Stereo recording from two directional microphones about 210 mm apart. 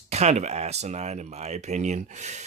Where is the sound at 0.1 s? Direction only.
30° right (ahead or behind).